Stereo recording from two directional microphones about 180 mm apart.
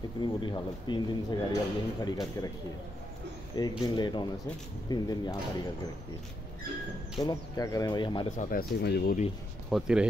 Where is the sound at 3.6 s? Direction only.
25° left (ahead or behind).